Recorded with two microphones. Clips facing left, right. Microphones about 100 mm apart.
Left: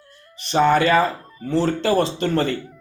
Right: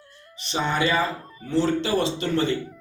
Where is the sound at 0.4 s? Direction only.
50° left (ahead or behind).